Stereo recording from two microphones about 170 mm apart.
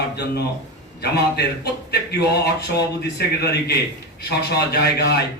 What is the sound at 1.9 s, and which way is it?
A man's voice, 70° left (ahead or behind).